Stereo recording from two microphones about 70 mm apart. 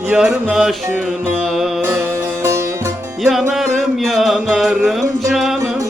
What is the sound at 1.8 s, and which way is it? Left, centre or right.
Music, right.